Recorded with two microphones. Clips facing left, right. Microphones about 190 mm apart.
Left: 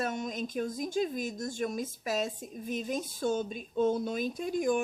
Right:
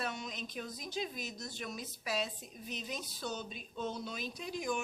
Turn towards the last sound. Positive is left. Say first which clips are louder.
# left 9 dB
turn(degrees=50)  # may be behind; listen again after turning